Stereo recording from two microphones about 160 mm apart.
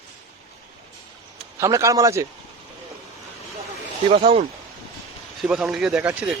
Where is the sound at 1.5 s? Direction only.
20° right (ahead or behind).